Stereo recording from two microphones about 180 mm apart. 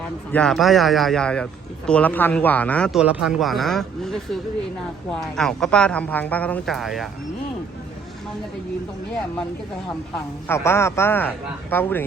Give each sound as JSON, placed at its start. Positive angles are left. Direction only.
{"t": 0.3, "sound": "a woman's voice", "side_deg": 5}
{"t": 3.0, "sound": "a woman's voice", "side_deg": -5}
{"t": 10.5, "sound": "speech", "side_deg": 15}